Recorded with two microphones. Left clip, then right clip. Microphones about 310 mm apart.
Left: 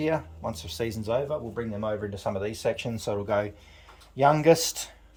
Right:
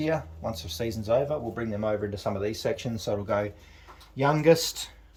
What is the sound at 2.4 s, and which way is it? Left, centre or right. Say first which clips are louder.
Speech: left 1 dB; centre.